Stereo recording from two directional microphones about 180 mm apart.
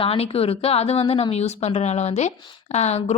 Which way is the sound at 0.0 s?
30° left (ahead or behind).